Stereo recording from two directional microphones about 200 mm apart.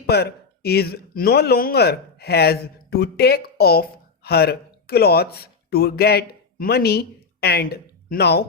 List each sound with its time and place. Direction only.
0.1 s speech: 55° left (ahead or behind)